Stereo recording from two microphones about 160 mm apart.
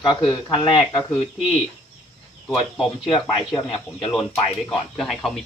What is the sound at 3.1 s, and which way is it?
Speech, 35° left (ahead or behind).